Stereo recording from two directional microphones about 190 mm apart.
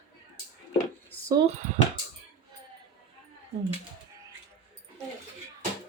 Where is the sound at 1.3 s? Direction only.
25° right (ahead or behind).